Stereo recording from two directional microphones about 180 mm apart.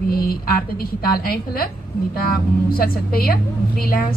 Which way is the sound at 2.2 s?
55° left (ahead or behind).